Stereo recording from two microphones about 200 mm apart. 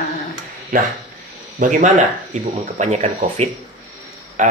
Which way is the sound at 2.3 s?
35° right (ahead or behind).